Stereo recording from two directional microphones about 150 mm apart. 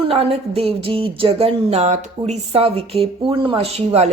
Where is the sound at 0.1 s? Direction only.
40° right (ahead or behind).